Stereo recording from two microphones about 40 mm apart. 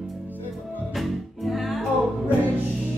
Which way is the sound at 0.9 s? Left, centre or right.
Centre.